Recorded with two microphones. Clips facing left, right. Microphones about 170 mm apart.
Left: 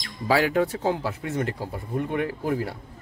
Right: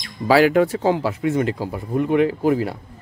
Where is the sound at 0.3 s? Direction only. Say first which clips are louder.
Right 7 dB; 90° right.